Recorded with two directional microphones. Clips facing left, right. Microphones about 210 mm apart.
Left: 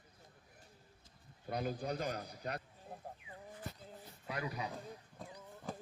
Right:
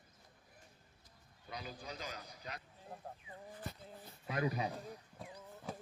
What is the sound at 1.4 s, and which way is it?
A man's voice, 50° left (ahead or behind).